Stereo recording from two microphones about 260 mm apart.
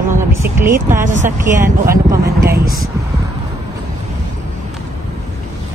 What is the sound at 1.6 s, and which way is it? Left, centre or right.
Speech, centre.